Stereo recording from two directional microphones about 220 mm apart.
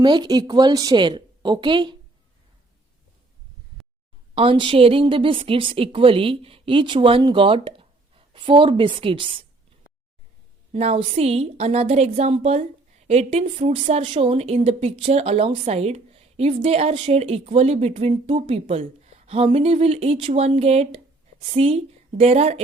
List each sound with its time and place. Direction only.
0.0 s a woman's voice: 20° right (ahead or behind)
4.4 s a woman's voice: 25° right (ahead or behind)
10.7 s a woman's voice: 30° right (ahead or behind)